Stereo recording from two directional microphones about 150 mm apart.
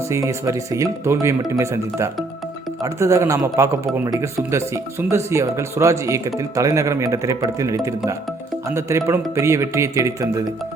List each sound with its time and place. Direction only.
0.1 s speech: 20° right (ahead or behind)